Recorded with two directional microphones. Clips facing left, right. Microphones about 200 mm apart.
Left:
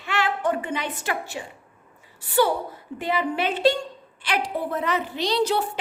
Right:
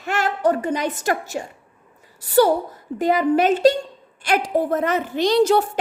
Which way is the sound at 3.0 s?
40° right (ahead or behind).